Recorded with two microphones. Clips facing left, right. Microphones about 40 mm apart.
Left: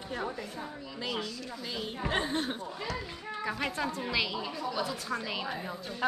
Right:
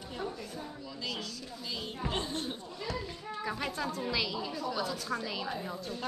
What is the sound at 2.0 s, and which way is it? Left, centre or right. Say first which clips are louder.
A woman's voice: left 5 dB; left.